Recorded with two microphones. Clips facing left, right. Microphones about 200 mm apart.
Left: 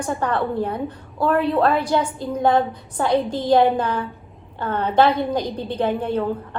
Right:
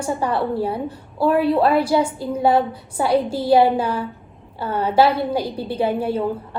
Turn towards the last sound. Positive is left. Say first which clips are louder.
# right 1 dB
turn(degrees=-10)  # may be behind; listen again after turning